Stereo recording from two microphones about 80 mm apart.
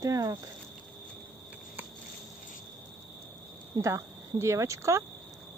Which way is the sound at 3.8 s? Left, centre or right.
Right.